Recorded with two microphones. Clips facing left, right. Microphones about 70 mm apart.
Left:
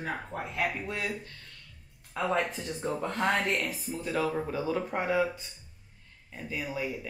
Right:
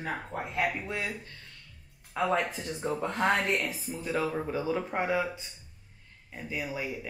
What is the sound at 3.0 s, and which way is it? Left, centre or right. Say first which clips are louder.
Speech: right 1 dB; right.